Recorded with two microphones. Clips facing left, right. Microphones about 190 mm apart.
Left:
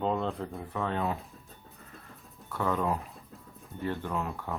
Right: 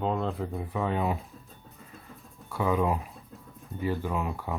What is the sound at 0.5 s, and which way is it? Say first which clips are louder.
Speech: right 3 dB; 15° right (ahead or behind).